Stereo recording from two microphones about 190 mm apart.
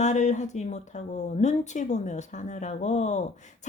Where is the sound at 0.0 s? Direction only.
40° left (ahead or behind).